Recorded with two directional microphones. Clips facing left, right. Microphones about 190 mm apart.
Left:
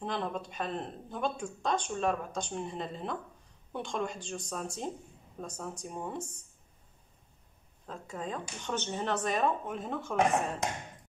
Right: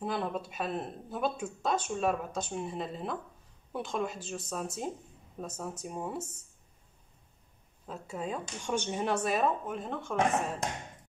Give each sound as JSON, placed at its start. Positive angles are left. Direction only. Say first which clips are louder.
{"t": 0.0, "sound": "speech", "louder": "right 1 dB", "side_deg": -5}
{"t": 7.8, "sound": "speech", "louder": "right 2 dB", "side_deg": -10}